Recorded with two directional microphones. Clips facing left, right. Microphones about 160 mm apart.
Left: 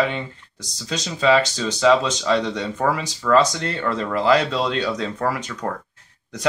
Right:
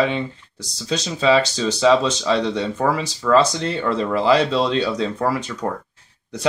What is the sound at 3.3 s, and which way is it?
Speech, 25° right (ahead or behind).